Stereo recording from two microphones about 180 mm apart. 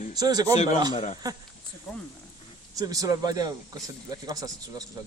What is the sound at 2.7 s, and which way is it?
Speech, 20° right (ahead or behind).